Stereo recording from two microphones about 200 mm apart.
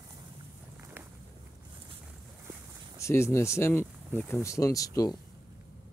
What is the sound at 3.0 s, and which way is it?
Speech, 15° left (ahead or behind).